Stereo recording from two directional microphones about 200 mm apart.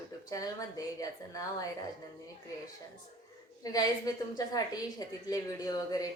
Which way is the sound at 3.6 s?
20° left (ahead or behind).